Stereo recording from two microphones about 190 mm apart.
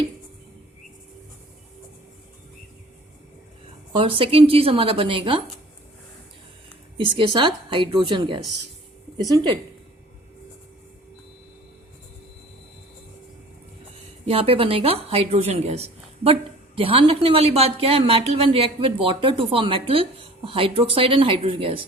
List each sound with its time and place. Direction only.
3.9 s speech: 30° right (ahead or behind)
7.3 s speech: 25° right (ahead or behind)
14.3 s a woman's voice: 30° right (ahead or behind)